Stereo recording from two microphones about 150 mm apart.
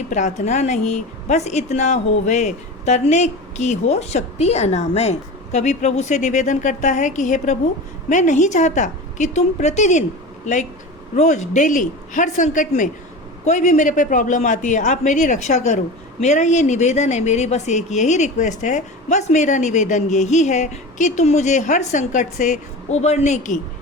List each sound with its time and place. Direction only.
0.1 s a woman's voice: 50° left (ahead or behind)